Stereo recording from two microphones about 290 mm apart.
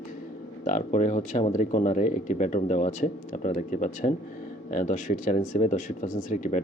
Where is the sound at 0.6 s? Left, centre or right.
Left.